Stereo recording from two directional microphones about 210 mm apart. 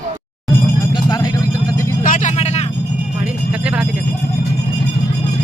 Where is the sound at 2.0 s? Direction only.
40° left (ahead or behind).